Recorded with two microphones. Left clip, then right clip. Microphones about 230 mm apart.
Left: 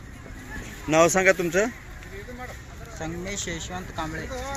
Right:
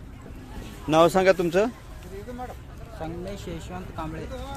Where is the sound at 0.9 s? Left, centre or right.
Centre.